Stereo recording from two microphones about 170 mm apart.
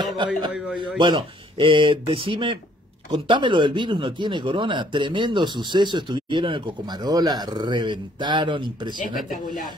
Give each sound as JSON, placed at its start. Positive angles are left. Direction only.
{"t": 0.5, "sound": "a man's voice", "side_deg": -5}
{"t": 0.7, "sound": "speech", "side_deg": -25}